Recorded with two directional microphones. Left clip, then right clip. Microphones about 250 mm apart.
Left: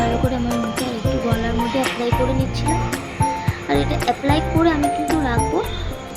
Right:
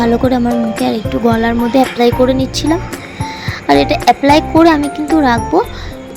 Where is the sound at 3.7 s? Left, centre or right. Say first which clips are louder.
Right 11 dB; right.